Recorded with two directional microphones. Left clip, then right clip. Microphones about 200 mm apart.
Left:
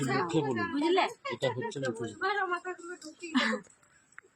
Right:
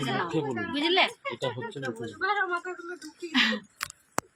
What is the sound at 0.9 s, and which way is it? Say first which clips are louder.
Speech: right 4 dB; 25° right (ahead or behind).